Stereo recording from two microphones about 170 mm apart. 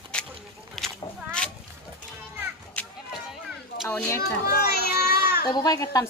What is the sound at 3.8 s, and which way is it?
Speech, 15° left (ahead or behind).